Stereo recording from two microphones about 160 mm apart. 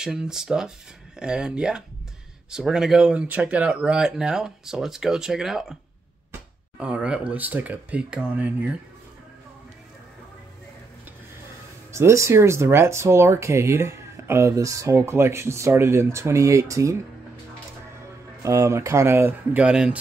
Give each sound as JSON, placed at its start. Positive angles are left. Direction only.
{"t": 0.0, "sound": "speech", "side_deg": -5}
{"t": 6.8, "sound": "speech", "side_deg": -5}
{"t": 11.9, "sound": "speech", "side_deg": -15}
{"t": 18.4, "sound": "speech", "side_deg": -20}